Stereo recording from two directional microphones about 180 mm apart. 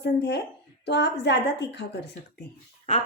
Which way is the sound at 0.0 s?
70° left (ahead or behind).